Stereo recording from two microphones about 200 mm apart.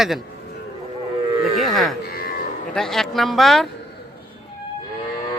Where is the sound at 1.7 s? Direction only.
Centre (ahead or behind).